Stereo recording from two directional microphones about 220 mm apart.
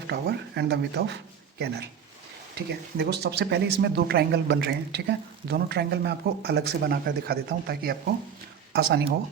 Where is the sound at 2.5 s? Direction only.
50° right (ahead or behind).